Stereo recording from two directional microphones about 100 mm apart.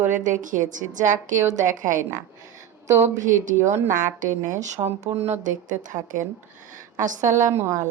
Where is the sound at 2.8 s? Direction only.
25° right (ahead or behind).